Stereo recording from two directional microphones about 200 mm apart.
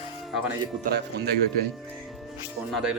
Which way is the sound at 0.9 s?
55° right (ahead or behind).